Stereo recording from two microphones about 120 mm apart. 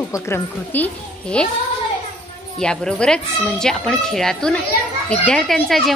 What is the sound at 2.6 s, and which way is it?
Speech, 5° left (ahead or behind).